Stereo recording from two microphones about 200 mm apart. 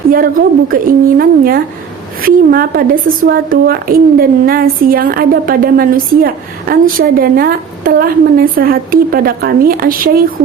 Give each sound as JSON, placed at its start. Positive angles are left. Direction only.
{"t": 0.1, "sound": "a woman's voice", "side_deg": -45}